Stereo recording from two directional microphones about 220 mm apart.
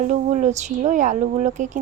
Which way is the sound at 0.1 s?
35° right (ahead or behind).